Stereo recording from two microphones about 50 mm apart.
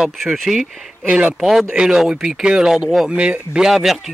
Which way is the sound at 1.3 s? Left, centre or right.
Centre.